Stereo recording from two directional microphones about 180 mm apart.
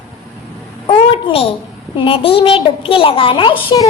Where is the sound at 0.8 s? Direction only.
30° left (ahead or behind).